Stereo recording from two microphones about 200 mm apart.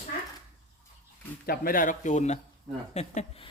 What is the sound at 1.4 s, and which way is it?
Speech, 45° left (ahead or behind).